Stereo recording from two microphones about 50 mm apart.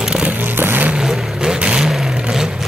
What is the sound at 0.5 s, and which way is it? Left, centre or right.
Vehicle, right.